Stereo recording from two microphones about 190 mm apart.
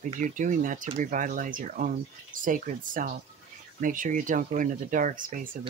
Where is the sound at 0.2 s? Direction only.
40° right (ahead or behind).